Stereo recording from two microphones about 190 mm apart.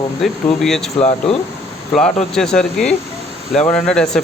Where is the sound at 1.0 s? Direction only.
35° left (ahead or behind).